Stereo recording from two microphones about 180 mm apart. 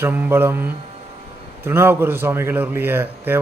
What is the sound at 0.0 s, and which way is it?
A man's voice, 10° right (ahead or behind).